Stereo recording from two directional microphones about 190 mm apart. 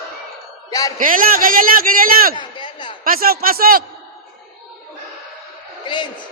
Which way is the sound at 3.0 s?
50° right (ahead or behind).